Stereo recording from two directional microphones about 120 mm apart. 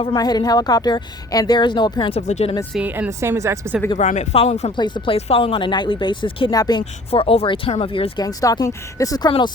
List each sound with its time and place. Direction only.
0.1 s speech: 35° left (ahead or behind)
2.2 s speech: 65° left (ahead or behind)
2.7 s a woman's voice: 10° right (ahead or behind)
3.1 s speech: 25° right (ahead or behind)
3.9 s speech: 80° left
4.8 s speech: 40° left (ahead or behind)
5.1 s speech: 50° left (ahead or behind); by 6.8 s 35° left (ahead or behind)
7.1 s speech: 55° left (ahead or behind)
8.2 s speech: 30° left (ahead or behind)